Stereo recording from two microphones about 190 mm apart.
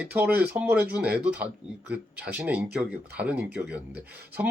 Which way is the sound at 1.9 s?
5° right (ahead or behind).